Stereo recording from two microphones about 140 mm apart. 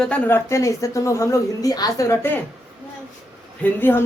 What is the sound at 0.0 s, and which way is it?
A woman's voice, 10° left (ahead or behind).